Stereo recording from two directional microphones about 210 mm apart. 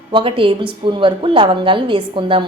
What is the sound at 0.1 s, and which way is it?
A woman's voice, 25° right (ahead or behind).